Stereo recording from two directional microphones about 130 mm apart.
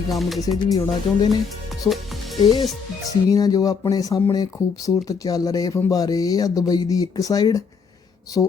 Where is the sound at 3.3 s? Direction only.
30° left (ahead or behind).